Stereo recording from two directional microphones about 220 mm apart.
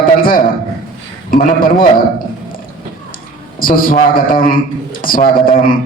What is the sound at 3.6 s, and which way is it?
A man's voice, 40° left (ahead or behind).